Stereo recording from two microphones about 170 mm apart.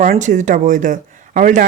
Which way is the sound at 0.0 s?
50° right (ahead or behind).